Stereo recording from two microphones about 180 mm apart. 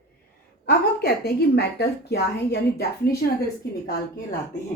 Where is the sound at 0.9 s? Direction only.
60° left (ahead or behind).